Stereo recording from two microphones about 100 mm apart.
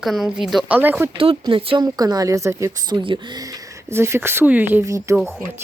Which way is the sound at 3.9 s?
25° right (ahead or behind).